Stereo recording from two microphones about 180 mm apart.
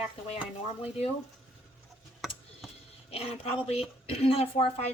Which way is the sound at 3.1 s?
35° left (ahead or behind).